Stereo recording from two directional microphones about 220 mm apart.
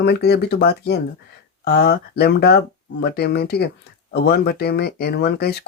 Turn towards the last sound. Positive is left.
turn(degrees=45)  # may be behind; listen again after turning